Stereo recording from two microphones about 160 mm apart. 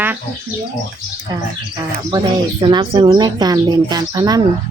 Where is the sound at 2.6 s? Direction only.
30° right (ahead or behind).